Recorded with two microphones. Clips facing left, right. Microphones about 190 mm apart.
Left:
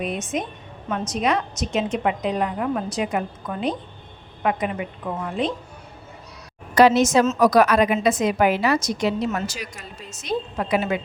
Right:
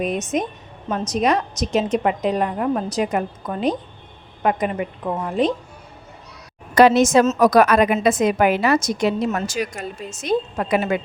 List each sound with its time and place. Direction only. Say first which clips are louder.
0.0 s a woman's voice: right 4 dB; 40° right (ahead or behind)
6.7 s a woman's voice: right 2 dB; 55° right (ahead or behind)